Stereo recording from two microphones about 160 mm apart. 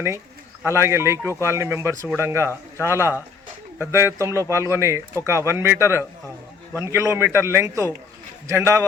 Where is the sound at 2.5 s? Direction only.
15° left (ahead or behind).